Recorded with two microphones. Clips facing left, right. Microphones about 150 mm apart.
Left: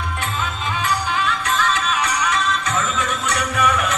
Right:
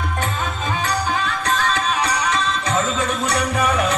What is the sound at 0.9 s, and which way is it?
Music, 40° right (ahead or behind).